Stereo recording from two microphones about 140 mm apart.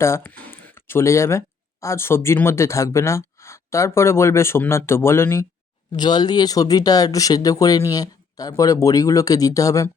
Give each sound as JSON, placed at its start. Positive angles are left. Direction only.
{"t": 0.0, "sound": "speech", "side_deg": 15}
{"t": 5.9, "sound": "speech", "side_deg": 30}